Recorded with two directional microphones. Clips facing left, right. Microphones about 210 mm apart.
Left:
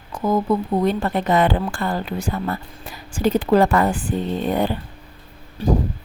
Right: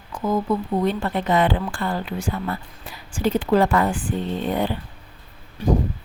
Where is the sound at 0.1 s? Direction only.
40° left (ahead or behind).